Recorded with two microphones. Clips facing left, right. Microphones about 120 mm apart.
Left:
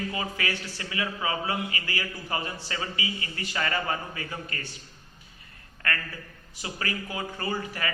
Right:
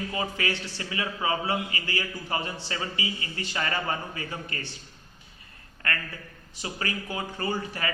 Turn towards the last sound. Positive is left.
turn(degrees=-30)  # may be behind; listen again after turning